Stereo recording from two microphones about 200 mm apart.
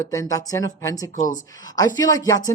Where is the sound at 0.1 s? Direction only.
15° left (ahead or behind).